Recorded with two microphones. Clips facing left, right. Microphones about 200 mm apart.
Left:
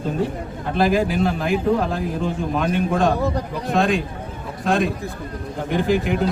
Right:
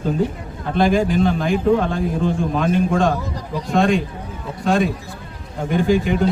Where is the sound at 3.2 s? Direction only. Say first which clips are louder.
Left 4 dB; 60° left (ahead or behind).